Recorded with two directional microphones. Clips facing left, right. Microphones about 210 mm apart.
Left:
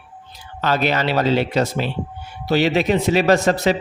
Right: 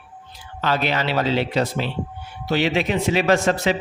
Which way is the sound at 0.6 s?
45° left (ahead or behind).